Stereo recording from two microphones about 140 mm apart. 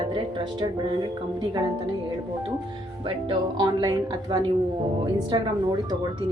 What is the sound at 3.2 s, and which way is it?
A woman's voice, 30° right (ahead or behind).